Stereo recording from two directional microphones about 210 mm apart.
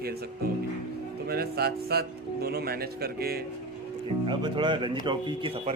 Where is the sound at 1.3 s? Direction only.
50° right (ahead or behind).